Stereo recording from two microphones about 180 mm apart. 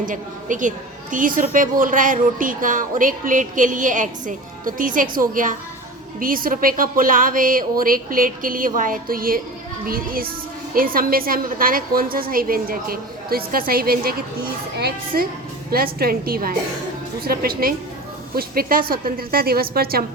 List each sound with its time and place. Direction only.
0.0 s a woman's voice: 45° right (ahead or behind)